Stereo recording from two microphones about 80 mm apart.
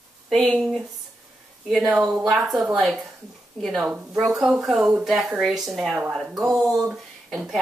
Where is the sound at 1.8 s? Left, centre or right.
Centre.